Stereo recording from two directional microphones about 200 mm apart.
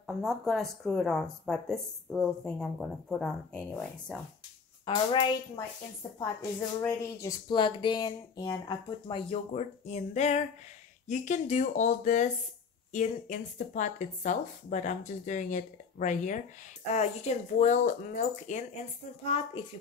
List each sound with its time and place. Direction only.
0.0 s speech: centre (ahead or behind)
4.8 s speech: 25° left (ahead or behind)
6.0 s speech: 15° left (ahead or behind); by 19.6 s 30° left (ahead or behind)